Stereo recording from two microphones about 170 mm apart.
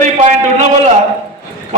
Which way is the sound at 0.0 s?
40° right (ahead or behind).